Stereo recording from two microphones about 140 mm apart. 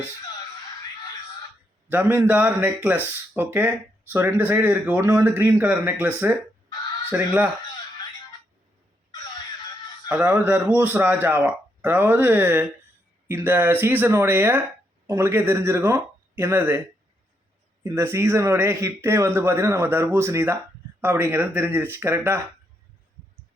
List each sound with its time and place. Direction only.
1.9 s speech: 15° right (ahead or behind)
10.1 s speech: 10° right (ahead or behind)
17.9 s speech: 20° right (ahead or behind)